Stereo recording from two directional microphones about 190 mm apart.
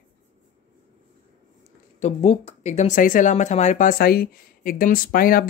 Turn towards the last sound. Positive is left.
turn(degrees=50)  # may be behind; listen again after turning